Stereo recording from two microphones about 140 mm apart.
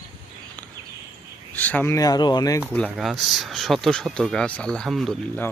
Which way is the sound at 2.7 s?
10° left (ahead or behind).